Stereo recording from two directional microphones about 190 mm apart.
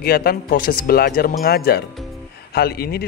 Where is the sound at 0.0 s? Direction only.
55° left (ahead or behind).